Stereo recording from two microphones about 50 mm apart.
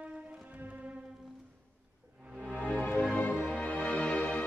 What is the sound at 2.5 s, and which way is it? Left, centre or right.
Music, right.